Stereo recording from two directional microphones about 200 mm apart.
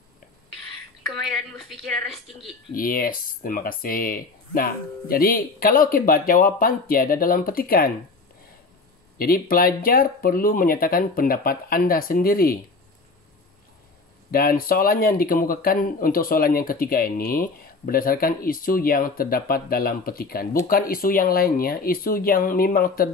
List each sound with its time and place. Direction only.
1.7 s a woman's voice: centre (ahead or behind)
2.7 s speech: 45° left (ahead or behind)
9.2 s speech: 45° left (ahead or behind)
14.3 s speech: 45° left (ahead or behind)